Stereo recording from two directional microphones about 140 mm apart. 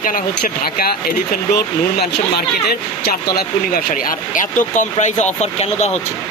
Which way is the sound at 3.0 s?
90° left.